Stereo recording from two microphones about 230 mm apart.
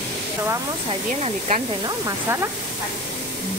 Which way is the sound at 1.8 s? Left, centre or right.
Centre.